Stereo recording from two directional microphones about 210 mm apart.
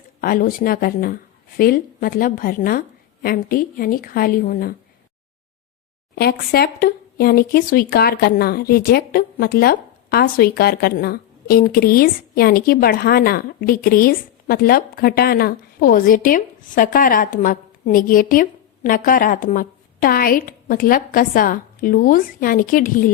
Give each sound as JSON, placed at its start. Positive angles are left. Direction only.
{"t": 0.2, "sound": "speech", "side_deg": 40}
{"t": 6.1, "sound": "speech", "side_deg": 50}